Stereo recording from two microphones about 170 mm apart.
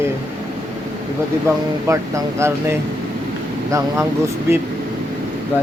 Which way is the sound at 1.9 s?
20° right (ahead or behind).